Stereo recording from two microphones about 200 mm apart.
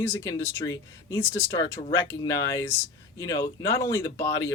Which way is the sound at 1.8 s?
35° left (ahead or behind).